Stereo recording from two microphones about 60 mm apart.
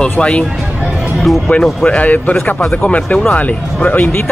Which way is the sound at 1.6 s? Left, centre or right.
Centre.